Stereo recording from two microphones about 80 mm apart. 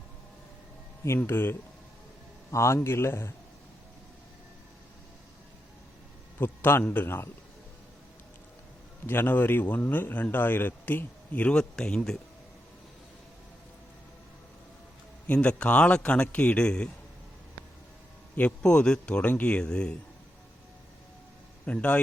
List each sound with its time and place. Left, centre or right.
1.0 s a man's voice: left
6.4 s a man's voice: left
9.0 s a man's voice: left; by 12.2 s centre
15.3 s speech: centre
18.3 s speech: centre
21.7 s speech: centre